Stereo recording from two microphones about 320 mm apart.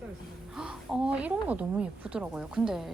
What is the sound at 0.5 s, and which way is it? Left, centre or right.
A woman's voice, centre.